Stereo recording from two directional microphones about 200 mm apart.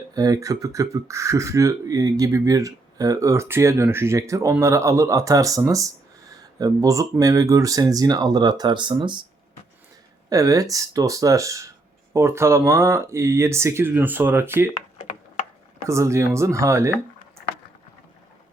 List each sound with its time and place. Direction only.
0.1 s speech: 20° right (ahead or behind)
10.2 s speech: 15° right (ahead or behind)
15.9 s speech: 15° right (ahead or behind)